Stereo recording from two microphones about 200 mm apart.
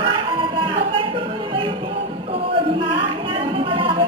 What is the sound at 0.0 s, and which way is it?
Music, 25° right (ahead or behind).